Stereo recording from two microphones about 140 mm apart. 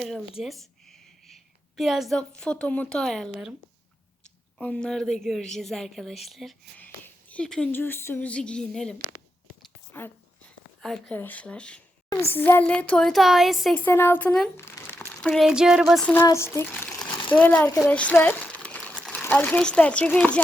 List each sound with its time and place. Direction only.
0.0 s a woman's voice: centre (ahead or behind)
4.5 s speech: 5° left (ahead or behind)
6.7 s a woman's voice: 10° left (ahead or behind)
13.7 s a woman's voice: 15° left (ahead or behind)
14.5 s crumpling: 15° left (ahead or behind)
15.2 s speech: centre (ahead or behind)
16.2 s speech: 20° left (ahead or behind)
17.3 s crumpling: 10° left (ahead or behind)
19.2 s a woman's voice: 15° left (ahead or behind)